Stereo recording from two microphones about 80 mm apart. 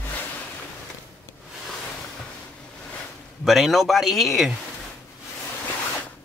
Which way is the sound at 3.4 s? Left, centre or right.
Centre.